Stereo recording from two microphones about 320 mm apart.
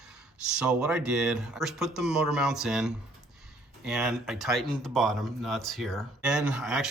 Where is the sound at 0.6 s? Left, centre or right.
Centre.